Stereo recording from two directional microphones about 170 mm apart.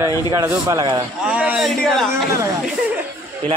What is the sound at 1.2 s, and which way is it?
Speech, 10° right (ahead or behind).